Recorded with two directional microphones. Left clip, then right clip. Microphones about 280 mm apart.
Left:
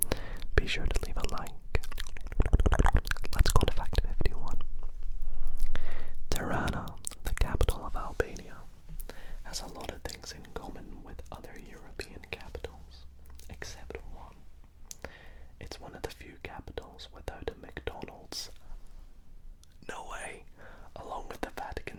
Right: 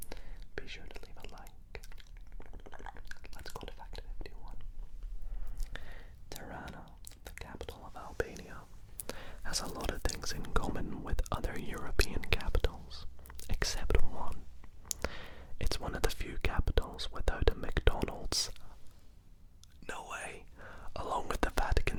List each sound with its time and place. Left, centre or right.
0.0 s whispering: left
5.6 s a sound: left
6.2 s whispering: left
8.4 s whispering: centre
9.0 s whispering: right
14.8 s whispering: right
19.9 s whispering: centre; by 21.9 s right